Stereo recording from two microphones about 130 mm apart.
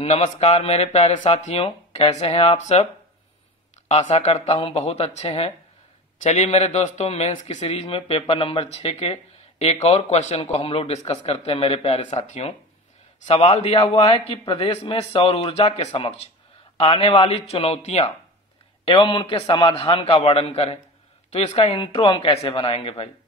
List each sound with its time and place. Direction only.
0.0 s speech: 50° left (ahead or behind)
3.9 s a man's voice: 55° left (ahead or behind)
21.7 s speech: 40° left (ahead or behind)